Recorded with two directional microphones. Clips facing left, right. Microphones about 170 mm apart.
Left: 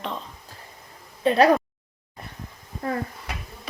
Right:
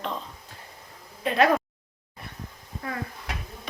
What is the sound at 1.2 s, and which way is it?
Speech, 35° left (ahead or behind).